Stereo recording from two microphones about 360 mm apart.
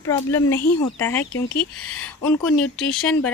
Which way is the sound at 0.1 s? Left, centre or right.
Centre.